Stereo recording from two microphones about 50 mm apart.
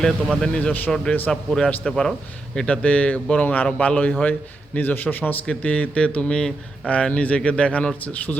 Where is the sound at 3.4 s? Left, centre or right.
Left.